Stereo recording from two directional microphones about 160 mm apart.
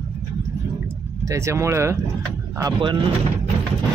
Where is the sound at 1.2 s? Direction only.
20° right (ahead or behind).